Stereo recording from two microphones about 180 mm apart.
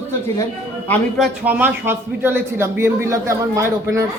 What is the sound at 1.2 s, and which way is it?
A man's voice, 10° right (ahead or behind).